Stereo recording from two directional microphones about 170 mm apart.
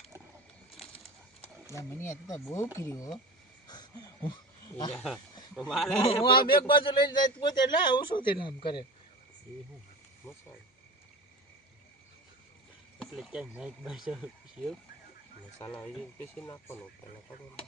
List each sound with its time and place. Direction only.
1.7 s speech: 15° left (ahead or behind)
3.7 s wheeze: 25° left (ahead or behind)
4.9 s speech: centre (ahead or behind)
6.1 s a man's voice: 30° left (ahead or behind)
10.3 s speech: 15° left (ahead or behind)
13.0 s speech: centre (ahead or behind)
15.5 s speech: 15° left (ahead or behind)